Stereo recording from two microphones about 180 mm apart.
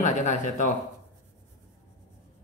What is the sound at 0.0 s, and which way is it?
Speech, 45° left (ahead or behind).